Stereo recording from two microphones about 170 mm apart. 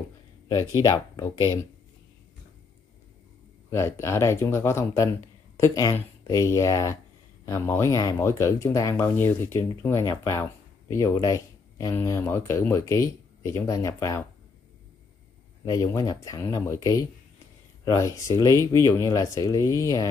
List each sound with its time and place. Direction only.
0.8 s speech: 25° left (ahead or behind)
3.7 s speech: 15° left (ahead or behind)
15.6 s speech: 20° left (ahead or behind)